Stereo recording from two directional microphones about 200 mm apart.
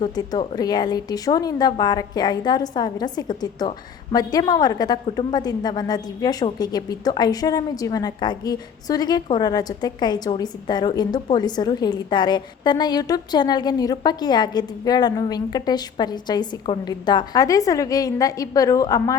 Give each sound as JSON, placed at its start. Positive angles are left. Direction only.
{"t": 0.0, "sound": "a woman's voice", "side_deg": 20}